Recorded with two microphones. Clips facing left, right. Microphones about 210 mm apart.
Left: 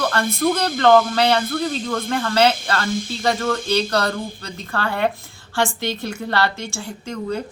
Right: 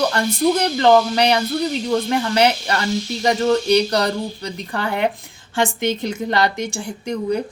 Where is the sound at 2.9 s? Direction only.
50° left (ahead or behind).